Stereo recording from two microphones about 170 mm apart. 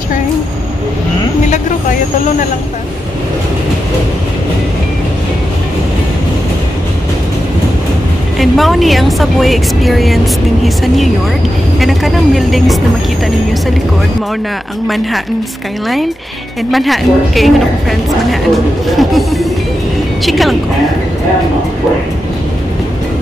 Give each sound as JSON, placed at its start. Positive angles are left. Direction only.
{"t": 1.5, "sound": "vehicle", "side_deg": 45}
{"t": 8.4, "sound": "a woman's voice", "side_deg": 0}
{"t": 16.7, "sound": "a woman's voice", "side_deg": 0}